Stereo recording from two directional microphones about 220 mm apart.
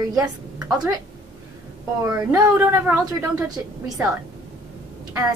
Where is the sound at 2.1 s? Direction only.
15° right (ahead or behind).